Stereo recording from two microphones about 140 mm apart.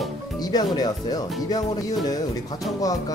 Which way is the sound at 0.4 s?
30° left (ahead or behind).